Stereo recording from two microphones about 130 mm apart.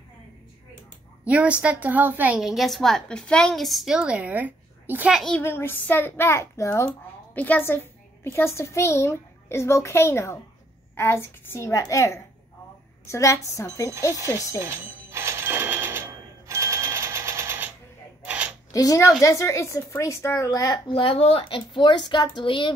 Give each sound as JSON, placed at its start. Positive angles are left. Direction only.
{"t": 1.2, "sound": "a woman's voice", "side_deg": -10}
{"t": 5.4, "sound": "a child's voice", "side_deg": 20}
{"t": 14.6, "sound": "telephone bell ringing", "side_deg": -15}
{"t": 18.2, "sound": "a sound", "side_deg": -10}
{"t": 18.7, "sound": "speech", "side_deg": 25}
{"t": 20.9, "sound": "a woman's voice", "side_deg": 45}